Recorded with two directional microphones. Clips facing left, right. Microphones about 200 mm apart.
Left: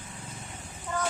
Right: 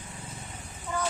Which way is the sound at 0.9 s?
10° right (ahead or behind).